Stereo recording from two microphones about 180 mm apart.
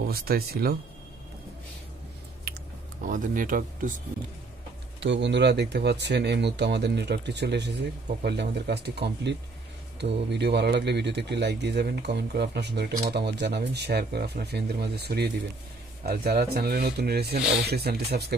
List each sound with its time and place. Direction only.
0.1 s speech: 55° right (ahead or behind)
3.1 s speech: 50° right (ahead or behind)
5.0 s speech: 80° right; by 18.3 s 60° right (ahead or behind)